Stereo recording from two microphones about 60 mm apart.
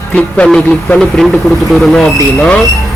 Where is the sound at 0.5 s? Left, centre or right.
Centre.